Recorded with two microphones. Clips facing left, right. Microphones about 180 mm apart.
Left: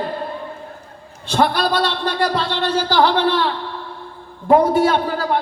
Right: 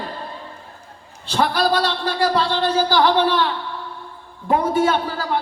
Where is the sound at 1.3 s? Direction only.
45° left (ahead or behind).